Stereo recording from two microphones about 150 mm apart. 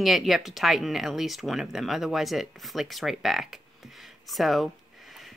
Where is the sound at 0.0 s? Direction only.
Centre (ahead or behind).